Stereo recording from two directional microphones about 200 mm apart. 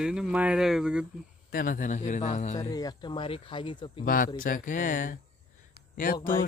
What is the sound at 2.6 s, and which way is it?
Speech, 20° left (ahead or behind).